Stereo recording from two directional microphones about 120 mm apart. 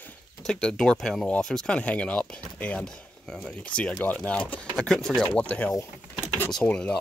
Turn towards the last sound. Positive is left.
turn(degrees=10)  # may be behind; listen again after turning